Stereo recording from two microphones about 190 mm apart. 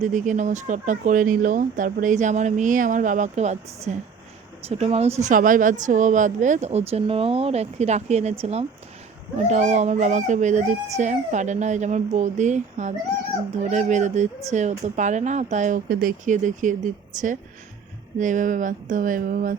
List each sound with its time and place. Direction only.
0.0 s speech: 40° right (ahead or behind)